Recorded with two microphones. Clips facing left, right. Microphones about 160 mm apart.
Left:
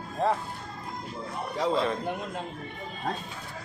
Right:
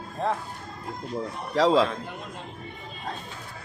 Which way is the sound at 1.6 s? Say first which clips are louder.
Right 7 dB; 90° right.